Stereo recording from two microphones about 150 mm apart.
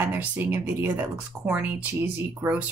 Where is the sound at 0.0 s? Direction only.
15° right (ahead or behind).